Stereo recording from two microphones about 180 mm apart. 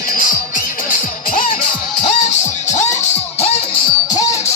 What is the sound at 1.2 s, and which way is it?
Music, 50° left (ahead or behind).